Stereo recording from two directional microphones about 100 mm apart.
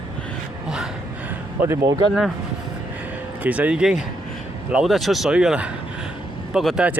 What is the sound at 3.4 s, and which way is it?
Speech, 15° right (ahead or behind).